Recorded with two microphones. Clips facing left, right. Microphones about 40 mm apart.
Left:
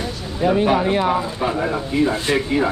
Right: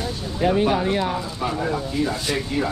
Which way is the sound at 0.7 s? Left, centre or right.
Centre.